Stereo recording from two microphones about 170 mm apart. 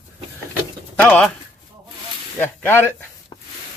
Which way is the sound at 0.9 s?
10° left (ahead or behind).